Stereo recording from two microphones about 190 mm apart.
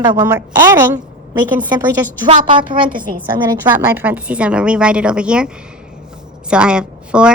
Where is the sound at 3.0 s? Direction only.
45° right (ahead or behind).